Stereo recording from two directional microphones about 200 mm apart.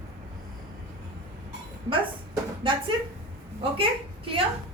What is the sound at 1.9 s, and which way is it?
A woman's voice, 25° right (ahead or behind).